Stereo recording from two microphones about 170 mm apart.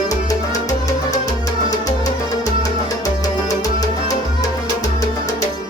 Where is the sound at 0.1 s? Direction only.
20° left (ahead or behind).